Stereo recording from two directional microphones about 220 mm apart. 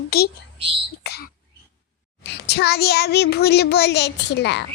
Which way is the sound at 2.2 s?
50° left (ahead or behind).